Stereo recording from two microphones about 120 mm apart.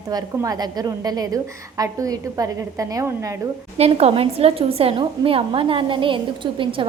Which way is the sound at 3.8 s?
60° right (ahead or behind).